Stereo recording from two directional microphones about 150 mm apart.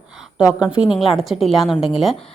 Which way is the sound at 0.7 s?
5° right (ahead or behind).